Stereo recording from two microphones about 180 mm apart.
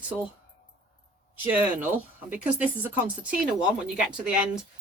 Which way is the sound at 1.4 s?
10° right (ahead or behind).